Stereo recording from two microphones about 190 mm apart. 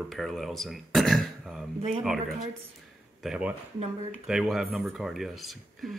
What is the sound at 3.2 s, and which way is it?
Speech, 5° right (ahead or behind).